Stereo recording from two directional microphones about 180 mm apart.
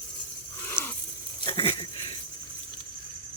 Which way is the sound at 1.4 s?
30° left (ahead or behind).